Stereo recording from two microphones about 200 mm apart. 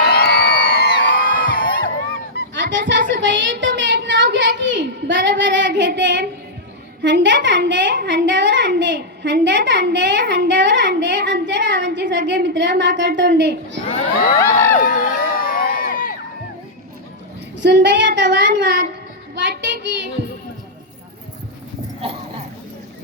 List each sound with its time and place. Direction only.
0.0 s music: 50° left (ahead or behind)
2.6 s a child's voice: 65° right (ahead or behind)
3.2 s a sound: 65° right (ahead or behind)
7.0 s a woman's voice: 65° right (ahead or behind)
14.8 s crowd: 40° left (ahead or behind)
17.6 s a woman's voice: 60° right (ahead or behind)
19.4 s child singing: 65° right (ahead or behind)